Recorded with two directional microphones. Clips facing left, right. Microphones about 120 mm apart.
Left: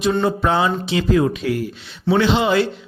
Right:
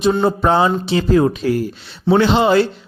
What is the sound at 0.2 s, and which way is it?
A man's voice, 35° right (ahead or behind).